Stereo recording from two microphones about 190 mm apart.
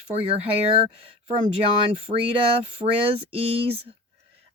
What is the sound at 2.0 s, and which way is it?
Speech, 30° right (ahead or behind).